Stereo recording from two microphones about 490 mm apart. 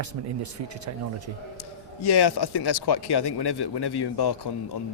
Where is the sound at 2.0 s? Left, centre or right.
Left.